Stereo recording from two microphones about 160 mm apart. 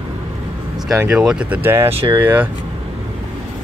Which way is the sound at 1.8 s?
35° right (ahead or behind).